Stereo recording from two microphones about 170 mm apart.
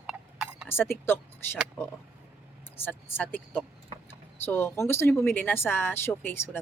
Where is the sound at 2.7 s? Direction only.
10° left (ahead or behind).